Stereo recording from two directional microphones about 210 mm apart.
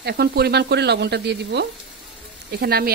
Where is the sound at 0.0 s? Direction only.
50° right (ahead or behind).